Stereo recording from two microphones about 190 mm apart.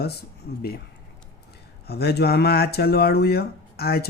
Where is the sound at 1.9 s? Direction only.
55° left (ahead or behind).